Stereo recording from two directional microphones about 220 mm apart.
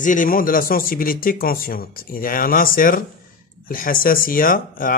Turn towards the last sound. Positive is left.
turn(degrees=40)  # may be behind; listen again after turning